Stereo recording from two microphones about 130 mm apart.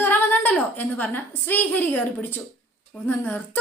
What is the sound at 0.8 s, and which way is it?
A woman's voice, 15° left (ahead or behind).